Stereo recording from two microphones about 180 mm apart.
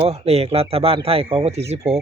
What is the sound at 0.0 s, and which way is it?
Speech, 35° right (ahead or behind).